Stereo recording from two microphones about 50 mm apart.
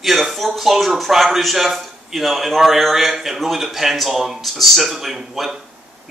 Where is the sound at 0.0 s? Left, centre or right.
Centre.